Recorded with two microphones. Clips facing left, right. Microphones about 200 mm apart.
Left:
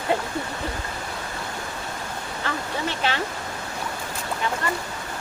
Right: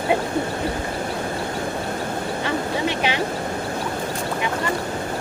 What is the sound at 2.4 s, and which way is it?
Vehicle, 15° right (ahead or behind).